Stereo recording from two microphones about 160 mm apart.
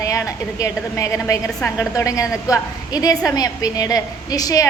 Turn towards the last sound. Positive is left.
turn(degrees=25)  # may be behind; listen again after turning